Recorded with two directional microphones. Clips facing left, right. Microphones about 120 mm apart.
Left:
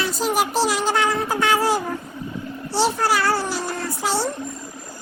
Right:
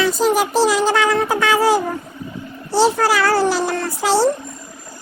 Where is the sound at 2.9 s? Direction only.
90° right.